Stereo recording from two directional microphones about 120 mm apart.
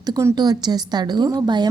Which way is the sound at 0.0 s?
35° right (ahead or behind).